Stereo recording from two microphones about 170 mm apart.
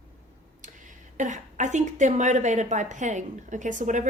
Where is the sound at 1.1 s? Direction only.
45° right (ahead or behind).